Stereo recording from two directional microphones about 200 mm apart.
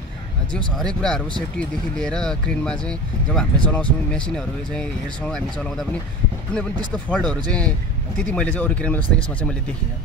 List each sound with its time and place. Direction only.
0.5 s speech: 5° left (ahead or behind)